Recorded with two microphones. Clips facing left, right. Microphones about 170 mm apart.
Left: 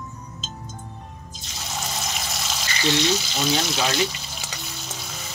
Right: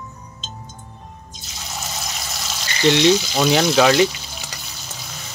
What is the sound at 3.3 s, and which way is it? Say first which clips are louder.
Speech: right 8 dB; 80° right.